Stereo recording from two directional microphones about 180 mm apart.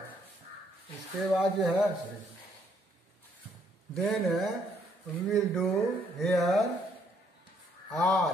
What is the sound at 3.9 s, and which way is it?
Speech, centre (ahead or behind).